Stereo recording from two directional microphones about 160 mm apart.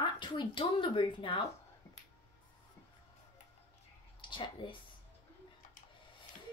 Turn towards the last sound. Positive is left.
turn(degrees=30)  # may be behind; listen again after turning